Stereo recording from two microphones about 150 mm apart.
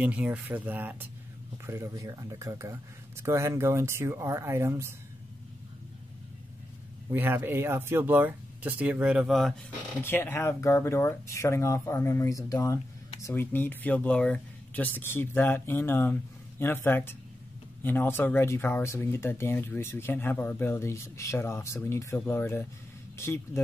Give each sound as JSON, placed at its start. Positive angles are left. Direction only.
{"t": 0.0, "sound": "speech", "side_deg": -10}
{"t": 7.1, "sound": "speech", "side_deg": -15}
{"t": 10.0, "sound": "speech", "side_deg": 15}